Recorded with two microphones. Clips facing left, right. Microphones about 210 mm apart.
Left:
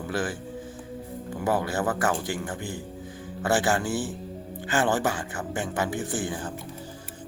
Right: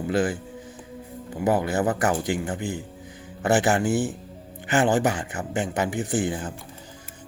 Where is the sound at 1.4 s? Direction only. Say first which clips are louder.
Right 4 dB; 15° right (ahead or behind).